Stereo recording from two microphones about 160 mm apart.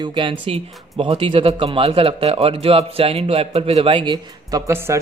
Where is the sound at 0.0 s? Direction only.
30° right (ahead or behind).